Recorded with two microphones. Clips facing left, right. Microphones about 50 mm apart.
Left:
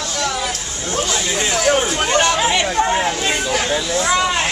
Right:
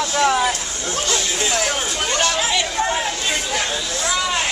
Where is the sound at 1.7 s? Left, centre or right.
Left.